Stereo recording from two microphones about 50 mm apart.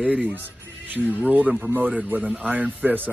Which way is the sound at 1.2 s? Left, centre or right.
Right.